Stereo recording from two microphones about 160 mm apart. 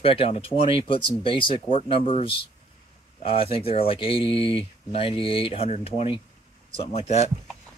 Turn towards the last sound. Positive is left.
turn(degrees=40)  # may be behind; listen again after turning